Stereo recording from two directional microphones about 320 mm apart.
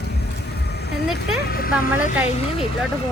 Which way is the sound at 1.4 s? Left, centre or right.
Left.